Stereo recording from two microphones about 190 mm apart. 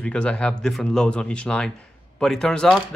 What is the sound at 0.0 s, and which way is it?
Speech, 5° left (ahead or behind).